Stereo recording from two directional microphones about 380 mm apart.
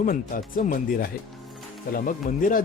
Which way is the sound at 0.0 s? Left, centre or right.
Left.